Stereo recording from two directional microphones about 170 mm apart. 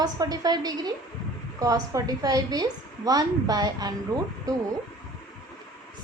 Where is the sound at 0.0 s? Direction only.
20° right (ahead or behind).